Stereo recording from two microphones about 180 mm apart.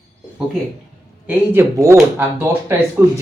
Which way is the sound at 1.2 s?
10° right (ahead or behind).